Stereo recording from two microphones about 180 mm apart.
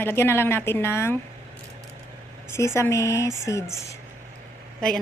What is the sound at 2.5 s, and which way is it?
A woman's voice, 15° left (ahead or behind).